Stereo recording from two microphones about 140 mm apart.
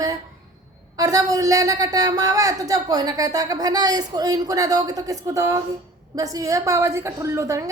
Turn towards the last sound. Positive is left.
turn(degrees=-20)  # may be behind; listen again after turning